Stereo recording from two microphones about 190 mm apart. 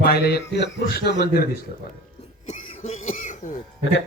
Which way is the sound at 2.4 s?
35° left (ahead or behind).